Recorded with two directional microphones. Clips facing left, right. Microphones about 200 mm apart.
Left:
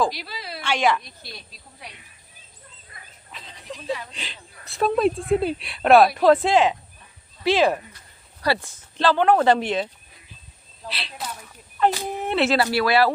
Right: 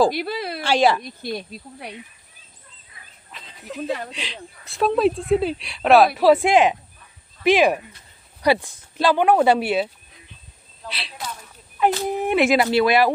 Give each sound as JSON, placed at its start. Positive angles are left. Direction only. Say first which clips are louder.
{"t": 0.1, "sound": "speech", "louder": "right 9 dB", "side_deg": -55}
{"t": 0.6, "sound": "a woman's voice", "louder": "right 4 dB", "side_deg": -35}
{"t": 1.2, "sound": "speech", "louder": "right 14 dB", "side_deg": -55}
{"t": 3.3, "sound": "snake", "louder": "right 1 dB", "side_deg": 0}
{"t": 3.8, "sound": "speech", "louder": "right 2 dB", "side_deg": -50}
{"t": 4.1, "sound": "speech", "louder": "right 6 dB", "side_deg": 0}
{"t": 12.0, "sound": "speech", "louder": "right 4 dB", "side_deg": -15}